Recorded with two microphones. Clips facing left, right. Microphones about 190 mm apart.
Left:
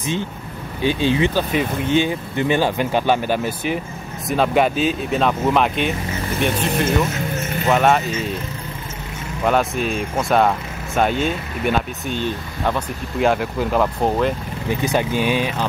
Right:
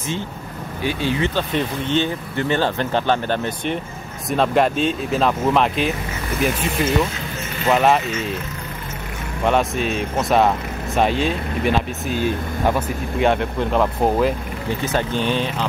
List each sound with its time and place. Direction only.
0.8 s speech: 20° left (ahead or behind)
1.3 s speech: 10° left (ahead or behind)
9.4 s speech: centre (ahead or behind)
14.9 s speech: 10° left (ahead or behind)